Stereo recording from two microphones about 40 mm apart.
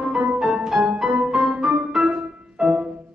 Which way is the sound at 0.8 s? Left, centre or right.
Right.